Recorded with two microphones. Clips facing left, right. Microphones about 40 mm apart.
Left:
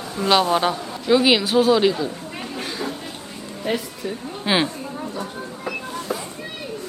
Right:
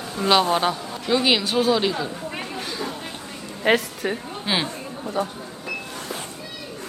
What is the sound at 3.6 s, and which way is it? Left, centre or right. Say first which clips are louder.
Speech: right 5 dB; right.